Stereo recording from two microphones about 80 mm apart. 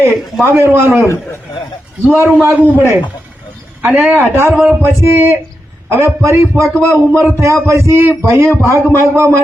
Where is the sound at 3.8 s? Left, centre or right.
Right.